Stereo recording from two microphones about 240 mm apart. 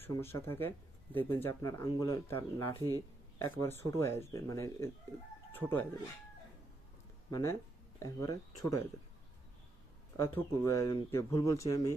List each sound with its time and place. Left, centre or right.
0.0 s speech: centre
2.7 s speech: centre
3.3 s speech: centre
7.3 s speech: centre
10.3 s speech: centre